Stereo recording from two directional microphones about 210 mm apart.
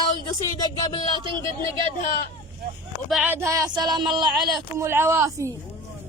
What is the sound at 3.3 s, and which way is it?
Speech, 15° right (ahead or behind).